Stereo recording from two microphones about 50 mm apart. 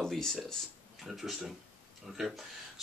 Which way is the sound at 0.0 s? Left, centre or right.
Centre.